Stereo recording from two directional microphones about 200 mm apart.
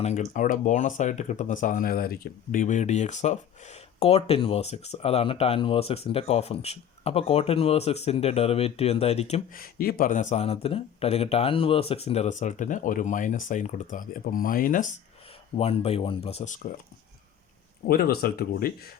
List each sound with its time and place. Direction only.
0.0 s speech: 35° left (ahead or behind)
9.6 s speech: 45° left (ahead or behind)
15.5 s speech: 30° left (ahead or behind)
17.8 s speech: 50° left (ahead or behind)